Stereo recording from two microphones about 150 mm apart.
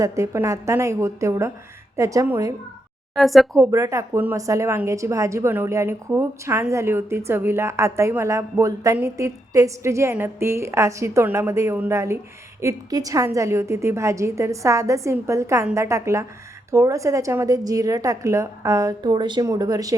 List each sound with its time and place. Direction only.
0.0 s speech: 20° right (ahead or behind)
3.2 s speech: centre (ahead or behind)
3.6 s speech: 20° right (ahead or behind)